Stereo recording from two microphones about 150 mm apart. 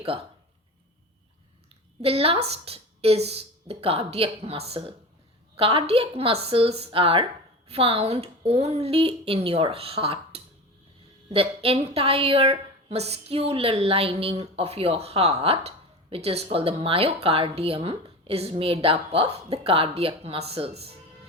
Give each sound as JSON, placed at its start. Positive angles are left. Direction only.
{"t": 0.0, "sound": "speech", "side_deg": -40}
{"t": 2.0, "sound": "a woman's voice", "side_deg": -40}